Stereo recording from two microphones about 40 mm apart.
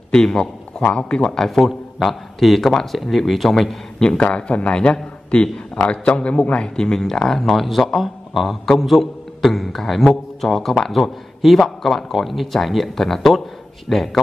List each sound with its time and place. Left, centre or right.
0.1 s a man's voice: left
1.2 s speech: centre
1.7 s a man's voice: centre
4.3 s a man's voice: left; by 14.2 s centre